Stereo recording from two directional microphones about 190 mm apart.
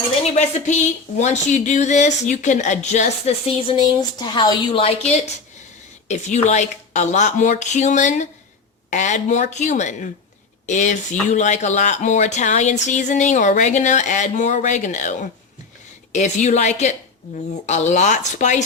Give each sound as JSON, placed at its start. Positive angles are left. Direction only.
{"t": 0.2, "sound": "a woman's voice", "side_deg": 40}